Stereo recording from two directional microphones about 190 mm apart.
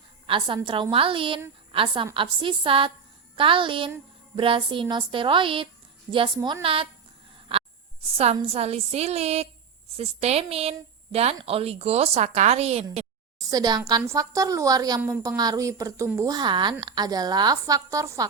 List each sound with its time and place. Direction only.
0.3 s a woman's voice: 25° right (ahead or behind)
7.5 s a sound: 30° right (ahead or behind)
8.0 s a woman's voice: 30° right (ahead or behind)
13.4 s a woman's voice: 20° right (ahead or behind)